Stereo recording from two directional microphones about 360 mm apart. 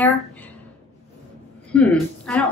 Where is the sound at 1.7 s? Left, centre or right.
Centre.